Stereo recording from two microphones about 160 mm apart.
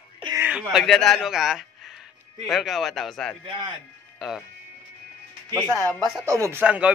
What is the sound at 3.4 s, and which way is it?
Speech, 30° right (ahead or behind).